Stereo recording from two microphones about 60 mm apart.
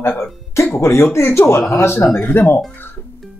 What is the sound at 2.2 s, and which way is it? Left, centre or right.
Speech, left.